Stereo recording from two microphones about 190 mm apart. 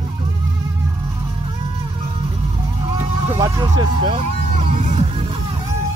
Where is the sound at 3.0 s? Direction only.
15° right (ahead or behind).